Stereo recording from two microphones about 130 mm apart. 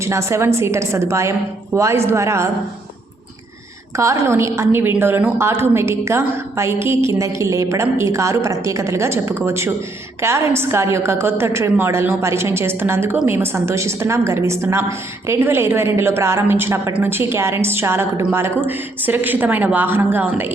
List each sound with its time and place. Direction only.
0.0 s a woman's voice: 20° right (ahead or behind)
3.9 s a woman's voice: 25° right (ahead or behind)